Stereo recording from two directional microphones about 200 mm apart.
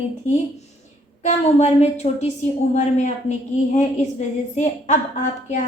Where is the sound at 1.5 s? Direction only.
35° left (ahead or behind).